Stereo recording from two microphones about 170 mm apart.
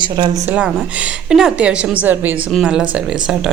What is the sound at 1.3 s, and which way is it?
A woman's voice, 5° right (ahead or behind).